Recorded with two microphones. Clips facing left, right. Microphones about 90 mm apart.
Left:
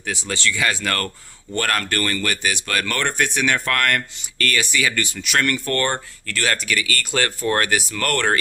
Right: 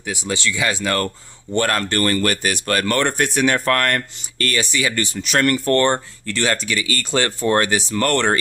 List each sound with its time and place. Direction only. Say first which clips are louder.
0.0 s speech: right 1 dB; 15° right (ahead or behind)